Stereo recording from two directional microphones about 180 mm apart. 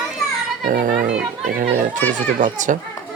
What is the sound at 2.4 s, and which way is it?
Speech, 45° right (ahead or behind).